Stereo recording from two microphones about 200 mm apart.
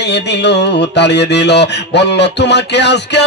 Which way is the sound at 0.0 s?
60° left (ahead or behind).